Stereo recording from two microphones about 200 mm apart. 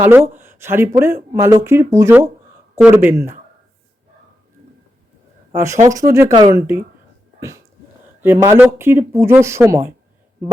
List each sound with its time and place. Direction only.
0.0 s speech: 10° right (ahead or behind)
5.5 s speech: 15° right (ahead or behind)
7.3 s a sound: 15° right (ahead or behind)
8.2 s speech: 10° right (ahead or behind)